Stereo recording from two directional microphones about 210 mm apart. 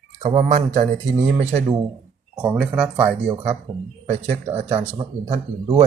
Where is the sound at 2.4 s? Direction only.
5° right (ahead or behind).